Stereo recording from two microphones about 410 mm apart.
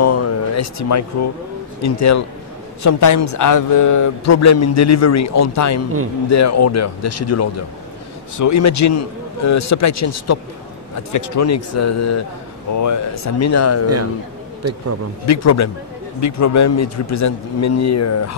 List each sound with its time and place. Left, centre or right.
0.0 s a sound: left
1.8 s speech: left
14.6 s speech: right
15.2 s speech: left